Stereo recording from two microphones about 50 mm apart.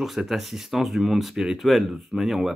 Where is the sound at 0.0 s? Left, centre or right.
Centre.